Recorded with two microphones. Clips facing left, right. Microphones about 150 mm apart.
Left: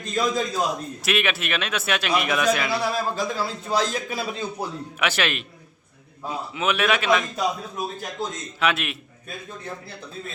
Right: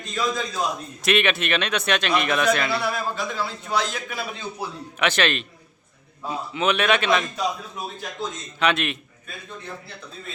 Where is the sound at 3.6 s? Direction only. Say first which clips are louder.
Left 3 dB; 35° left (ahead or behind).